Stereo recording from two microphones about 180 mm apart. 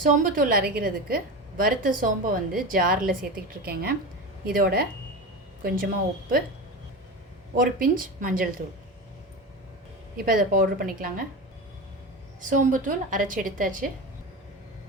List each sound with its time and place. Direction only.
0.0 s a woman's voice: 50° right (ahead or behind)
7.5 s a woman's voice: 50° right (ahead or behind)
10.2 s a woman's voice: 50° right (ahead or behind)
12.4 s a woman's voice: 45° right (ahead or behind)